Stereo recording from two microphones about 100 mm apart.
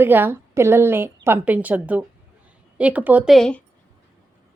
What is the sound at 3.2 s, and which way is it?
Speech, centre (ahead or behind).